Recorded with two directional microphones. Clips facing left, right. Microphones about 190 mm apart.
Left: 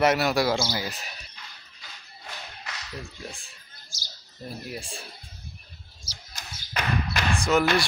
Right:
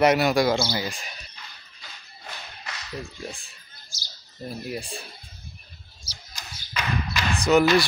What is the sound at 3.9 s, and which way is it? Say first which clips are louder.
Speech: even; 50° left (ahead or behind).